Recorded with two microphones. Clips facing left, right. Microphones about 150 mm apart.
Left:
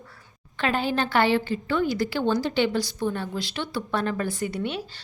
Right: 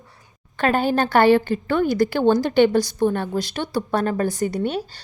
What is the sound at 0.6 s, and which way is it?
A woman's voice, 50° right (ahead or behind).